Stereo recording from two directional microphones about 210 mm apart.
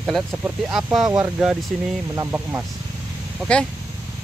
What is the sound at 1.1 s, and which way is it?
Speech, 15° right (ahead or behind).